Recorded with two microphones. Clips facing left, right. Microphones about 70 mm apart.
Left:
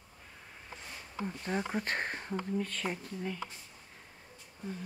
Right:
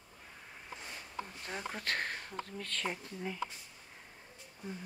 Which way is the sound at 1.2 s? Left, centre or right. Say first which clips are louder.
Left 11 dB; centre.